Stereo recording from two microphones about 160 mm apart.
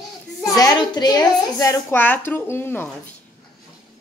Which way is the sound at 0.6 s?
25° left (ahead or behind).